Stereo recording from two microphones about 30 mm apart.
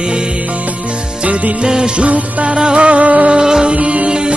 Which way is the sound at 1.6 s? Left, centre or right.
Right.